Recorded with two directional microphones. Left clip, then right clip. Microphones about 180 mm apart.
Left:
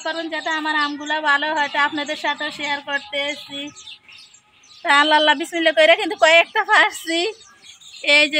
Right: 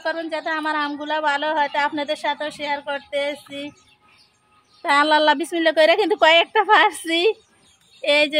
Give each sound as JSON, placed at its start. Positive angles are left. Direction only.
{"t": 0.0, "sound": "a woman's voice", "side_deg": -35}
{"t": 4.8, "sound": "a woman's voice", "side_deg": -50}